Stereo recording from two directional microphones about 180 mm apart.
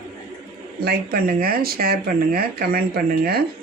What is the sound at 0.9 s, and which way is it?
Speech, 55° right (ahead or behind).